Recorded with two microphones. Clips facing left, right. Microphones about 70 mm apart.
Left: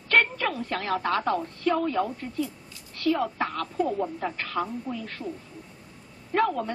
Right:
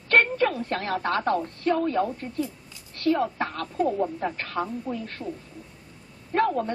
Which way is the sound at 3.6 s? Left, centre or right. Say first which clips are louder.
Right 4 dB; right.